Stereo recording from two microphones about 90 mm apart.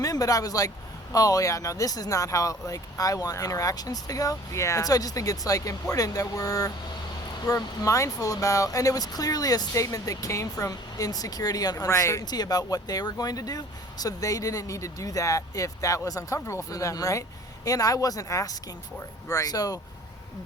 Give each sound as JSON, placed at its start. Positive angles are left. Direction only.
{"t": 0.0, "sound": "speech", "side_deg": 40}
{"t": 11.9, "sound": "speech", "side_deg": 35}
{"t": 12.2, "sound": "speech", "side_deg": 50}